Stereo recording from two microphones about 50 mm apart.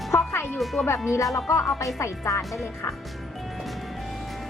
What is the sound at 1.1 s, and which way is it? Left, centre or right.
Speech, left.